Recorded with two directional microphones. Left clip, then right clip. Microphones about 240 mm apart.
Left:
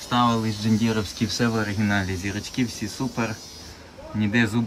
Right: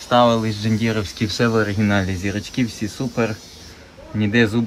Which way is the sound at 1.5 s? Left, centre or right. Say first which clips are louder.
Right 6 dB; centre.